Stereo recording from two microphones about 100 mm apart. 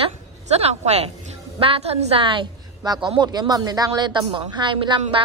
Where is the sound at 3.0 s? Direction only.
50° right (ahead or behind).